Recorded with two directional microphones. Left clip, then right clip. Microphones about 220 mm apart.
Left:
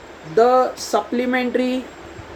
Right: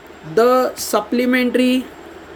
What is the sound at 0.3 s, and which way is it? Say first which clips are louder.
Speech: right 1 dB; 30° right (ahead or behind).